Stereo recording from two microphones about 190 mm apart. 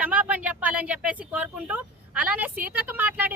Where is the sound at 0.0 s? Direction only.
5° right (ahead or behind).